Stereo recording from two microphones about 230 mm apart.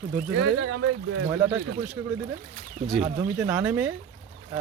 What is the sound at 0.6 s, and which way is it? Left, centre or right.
Speech, right.